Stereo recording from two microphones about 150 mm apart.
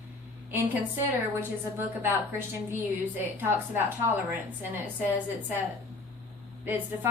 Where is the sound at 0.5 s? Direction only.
10° right (ahead or behind).